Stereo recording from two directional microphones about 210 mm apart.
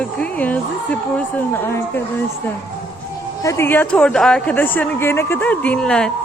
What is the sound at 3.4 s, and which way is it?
Speech, 15° left (ahead or behind).